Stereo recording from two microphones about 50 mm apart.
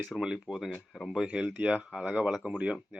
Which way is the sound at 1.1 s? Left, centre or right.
Centre.